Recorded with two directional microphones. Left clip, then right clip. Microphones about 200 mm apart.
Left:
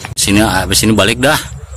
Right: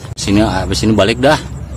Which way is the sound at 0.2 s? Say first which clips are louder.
Left 2 dB; 5° left (ahead or behind).